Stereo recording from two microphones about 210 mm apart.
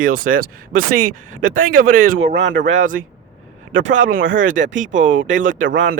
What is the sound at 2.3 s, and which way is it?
Speech, 60° right (ahead or behind).